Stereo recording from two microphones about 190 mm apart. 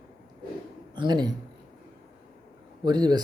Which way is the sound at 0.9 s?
25° right (ahead or behind).